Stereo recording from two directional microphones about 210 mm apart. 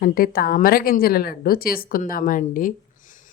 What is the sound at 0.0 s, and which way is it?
Speech, 45° left (ahead or behind).